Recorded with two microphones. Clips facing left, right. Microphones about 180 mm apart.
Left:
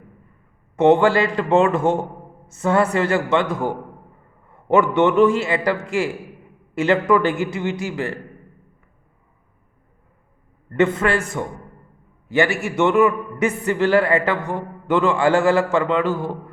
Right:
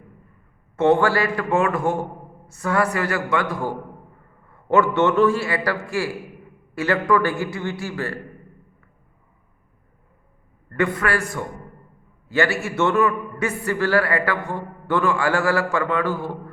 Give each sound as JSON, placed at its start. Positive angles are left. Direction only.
{"t": 0.8, "sound": "a man's voice", "side_deg": 20}
{"t": 10.7, "sound": "a man's voice", "side_deg": 25}